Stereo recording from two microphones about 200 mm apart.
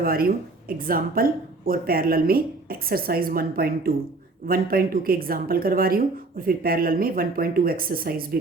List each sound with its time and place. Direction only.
0.0 s speech: 45° right (ahead or behind)